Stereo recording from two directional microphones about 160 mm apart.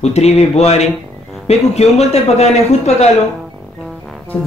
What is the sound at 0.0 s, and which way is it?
Speech, 40° left (ahead or behind).